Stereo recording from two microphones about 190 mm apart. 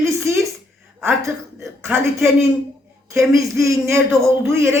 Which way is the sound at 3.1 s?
15° right (ahead or behind).